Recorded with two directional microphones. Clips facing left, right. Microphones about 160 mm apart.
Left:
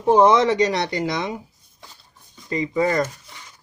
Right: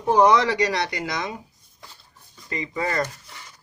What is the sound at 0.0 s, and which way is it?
Speech, 25° left (ahead or behind).